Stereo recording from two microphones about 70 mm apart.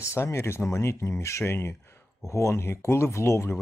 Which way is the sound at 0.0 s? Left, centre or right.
Left.